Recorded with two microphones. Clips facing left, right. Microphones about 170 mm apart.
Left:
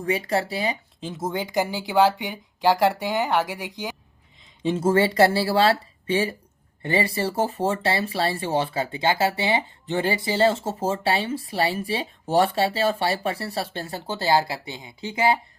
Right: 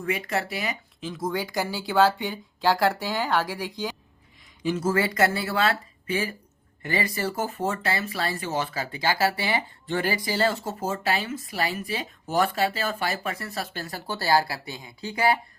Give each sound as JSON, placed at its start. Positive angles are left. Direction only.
{"t": 0.0, "sound": "speech", "side_deg": 30}
{"t": 4.6, "sound": "speech", "side_deg": 30}